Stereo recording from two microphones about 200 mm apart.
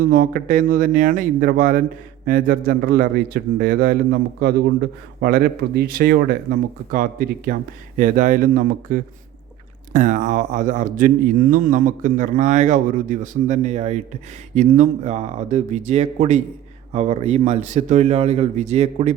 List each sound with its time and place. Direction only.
0.0 s a man's voice: 45° right (ahead or behind)